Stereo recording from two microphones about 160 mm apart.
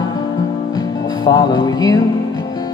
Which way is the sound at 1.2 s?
25° left (ahead or behind).